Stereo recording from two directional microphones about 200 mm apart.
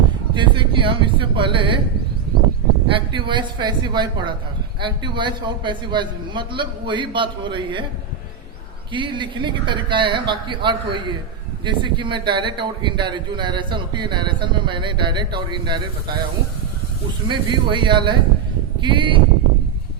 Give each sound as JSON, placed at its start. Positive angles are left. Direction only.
{"t": 0.3, "sound": "speech", "side_deg": -25}
{"t": 2.9, "sound": "speech", "side_deg": -25}
{"t": 8.9, "sound": "speech", "side_deg": -25}
{"t": 17.2, "sound": "speech", "side_deg": -25}